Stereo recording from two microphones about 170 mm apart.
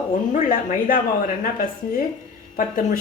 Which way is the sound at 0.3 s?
50° left (ahead or behind).